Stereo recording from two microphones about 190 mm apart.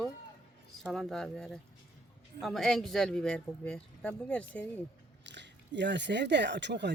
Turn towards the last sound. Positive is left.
turn(degrees=-65)  # may be behind; listen again after turning